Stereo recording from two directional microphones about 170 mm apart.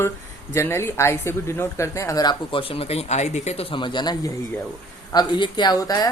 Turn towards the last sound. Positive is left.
turn(degrees=20)  # may be behind; listen again after turning